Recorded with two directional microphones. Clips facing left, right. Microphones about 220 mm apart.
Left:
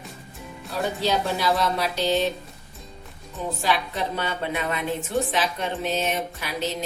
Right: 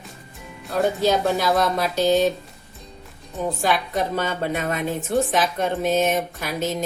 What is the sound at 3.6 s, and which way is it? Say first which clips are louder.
Speech: right 2 dB; 50° right (ahead or behind).